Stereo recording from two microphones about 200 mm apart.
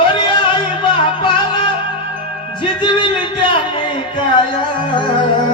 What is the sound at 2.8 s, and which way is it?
Music, 25° left (ahead or behind).